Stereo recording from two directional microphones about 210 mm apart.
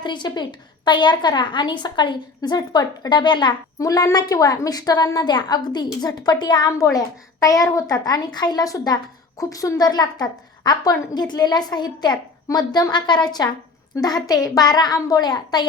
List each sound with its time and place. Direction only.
0.0 s a woman's voice: 20° left (ahead or behind)